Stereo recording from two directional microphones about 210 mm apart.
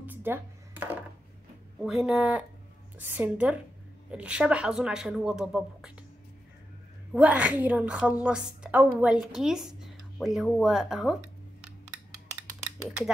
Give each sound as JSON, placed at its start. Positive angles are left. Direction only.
{"t": 0.0, "sound": "music", "side_deg": -10}
{"t": 1.8, "sound": "a woman's voice", "side_deg": 0}
{"t": 7.2, "sound": "a woman's voice", "side_deg": -5}